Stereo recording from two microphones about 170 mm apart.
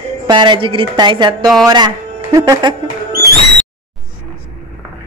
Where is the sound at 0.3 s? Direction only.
30° right (ahead or behind).